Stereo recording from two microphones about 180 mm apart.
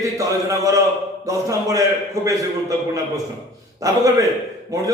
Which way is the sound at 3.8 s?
20° right (ahead or behind).